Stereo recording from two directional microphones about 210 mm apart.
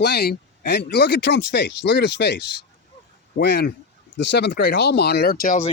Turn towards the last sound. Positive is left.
turn(degrees=40)  # may be behind; listen again after turning